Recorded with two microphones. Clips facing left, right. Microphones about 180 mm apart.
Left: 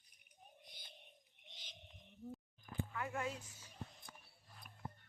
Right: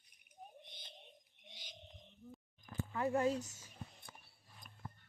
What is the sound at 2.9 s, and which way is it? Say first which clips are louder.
Speech: right 11 dB; 35° right (ahead or behind).